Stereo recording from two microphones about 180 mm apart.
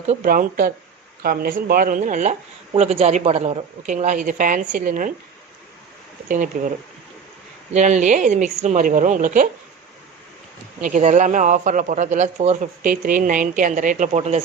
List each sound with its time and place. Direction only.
0.1 s a woman's voice: 50° right (ahead or behind)
6.2 s speech: 45° right (ahead or behind)
7.7 s speech: 40° right (ahead or behind)
10.8 s speech: 45° right (ahead or behind)